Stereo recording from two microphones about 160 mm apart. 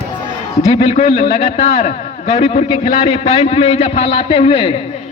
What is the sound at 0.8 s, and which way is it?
A man's voice, 40° left (ahead or behind).